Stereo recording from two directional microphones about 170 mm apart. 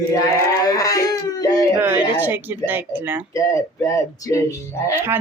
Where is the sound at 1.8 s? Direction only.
10° right (ahead or behind).